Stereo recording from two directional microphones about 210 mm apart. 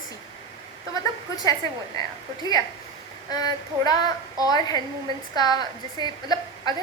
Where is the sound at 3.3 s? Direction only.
20° left (ahead or behind).